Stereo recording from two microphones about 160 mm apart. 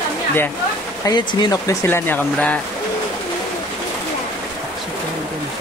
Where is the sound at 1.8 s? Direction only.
15° left (ahead or behind).